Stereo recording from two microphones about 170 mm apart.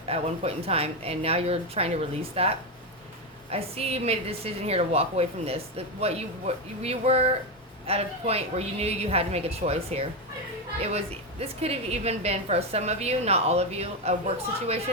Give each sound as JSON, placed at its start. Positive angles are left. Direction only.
{"t": 0.1, "sound": "a woman's voice", "side_deg": -35}